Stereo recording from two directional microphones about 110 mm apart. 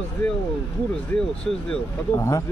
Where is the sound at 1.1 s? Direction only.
10° left (ahead or behind).